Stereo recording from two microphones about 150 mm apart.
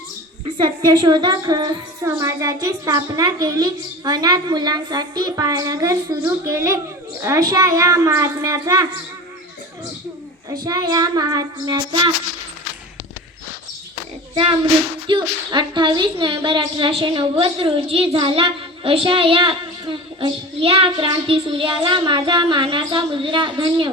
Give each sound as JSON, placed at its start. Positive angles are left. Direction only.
{"t": 0.4, "sound": "a woman's voice", "side_deg": -30}
{"t": 10.6, "sound": "a woman's voice", "side_deg": -25}
{"t": 14.3, "sound": "a child's voice", "side_deg": -35}